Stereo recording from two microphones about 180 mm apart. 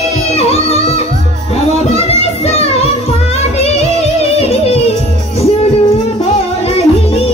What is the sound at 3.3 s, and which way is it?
Music, 35° left (ahead or behind).